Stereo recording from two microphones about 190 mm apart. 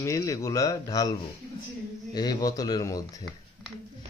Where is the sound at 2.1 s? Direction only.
20° left (ahead or behind).